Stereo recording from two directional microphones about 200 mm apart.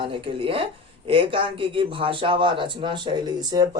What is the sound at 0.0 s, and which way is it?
Speech, 25° right (ahead or behind).